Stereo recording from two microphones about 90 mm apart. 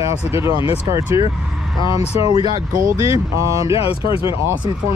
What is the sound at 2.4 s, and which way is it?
Speech, 50° right (ahead or behind).